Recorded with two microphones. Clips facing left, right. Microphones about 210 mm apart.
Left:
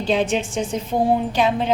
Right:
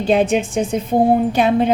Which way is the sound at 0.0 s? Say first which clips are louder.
Right 5 dB; 55° right (ahead or behind).